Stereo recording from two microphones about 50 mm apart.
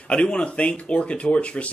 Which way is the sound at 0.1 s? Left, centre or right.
Left.